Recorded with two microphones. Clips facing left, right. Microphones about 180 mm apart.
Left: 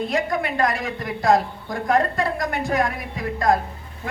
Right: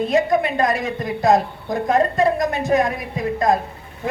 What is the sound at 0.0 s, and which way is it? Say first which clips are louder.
A woman's voice: right 6 dB; 20° right (ahead or behind).